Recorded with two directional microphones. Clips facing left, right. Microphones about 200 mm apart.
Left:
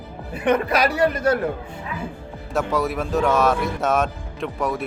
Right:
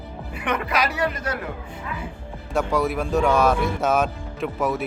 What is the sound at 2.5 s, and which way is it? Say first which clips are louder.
Speech: even; centre (ahead or behind).